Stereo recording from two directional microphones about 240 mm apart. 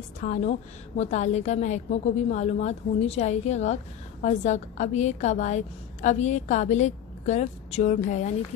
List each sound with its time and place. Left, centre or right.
0.2 s a woman's voice: left